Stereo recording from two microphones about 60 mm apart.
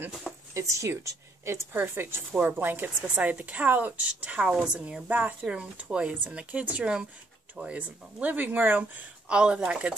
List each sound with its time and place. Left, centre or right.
0.3 s a sound: centre
0.6 s speech: right
1.8 s speech: right
3.0 s a woman's voice: right
9.3 s speech: centre